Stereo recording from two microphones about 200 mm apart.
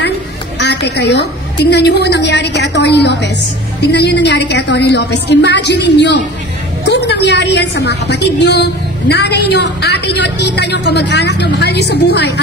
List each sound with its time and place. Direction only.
0.6 s a woman's voice: 60° left (ahead or behind)